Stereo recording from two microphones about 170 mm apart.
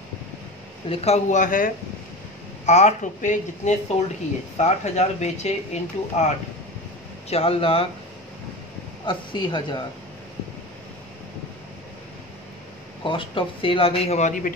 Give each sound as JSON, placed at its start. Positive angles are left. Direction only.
{"t": 0.8, "sound": "speech", "side_deg": 40}
{"t": 7.2, "sound": "speech", "side_deg": 35}
{"t": 9.0, "sound": "speech", "side_deg": 30}
{"t": 13.1, "sound": "speech", "side_deg": 30}